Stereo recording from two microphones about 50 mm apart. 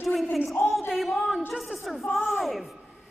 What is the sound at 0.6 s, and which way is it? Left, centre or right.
Speech, left.